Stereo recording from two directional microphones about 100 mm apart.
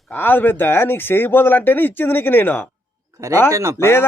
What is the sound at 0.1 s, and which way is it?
Speech, 20° left (ahead or behind).